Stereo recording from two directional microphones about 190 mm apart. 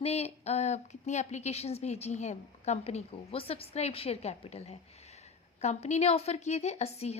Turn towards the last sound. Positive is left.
turn(degrees=35)  # may be behind; listen again after turning